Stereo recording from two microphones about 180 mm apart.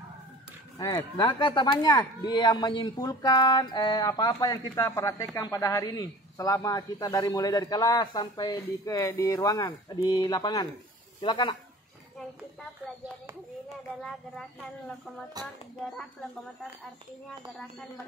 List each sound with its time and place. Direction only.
0.7 s speech: 25° left (ahead or behind)
15.4 s speech: 20° right (ahead or behind)